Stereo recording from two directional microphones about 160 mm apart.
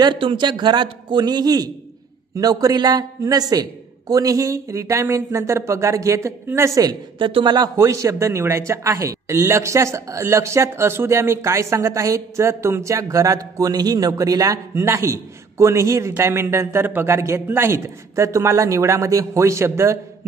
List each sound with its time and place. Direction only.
0.0 s speech: 30° right (ahead or behind)